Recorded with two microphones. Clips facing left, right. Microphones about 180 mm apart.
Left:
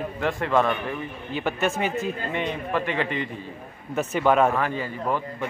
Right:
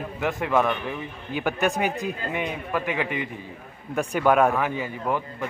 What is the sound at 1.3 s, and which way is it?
Speech, centre (ahead or behind).